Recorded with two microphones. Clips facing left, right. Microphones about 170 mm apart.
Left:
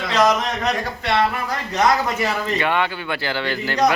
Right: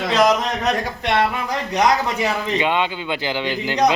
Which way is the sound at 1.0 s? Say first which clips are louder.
Even; 15° right (ahead or behind).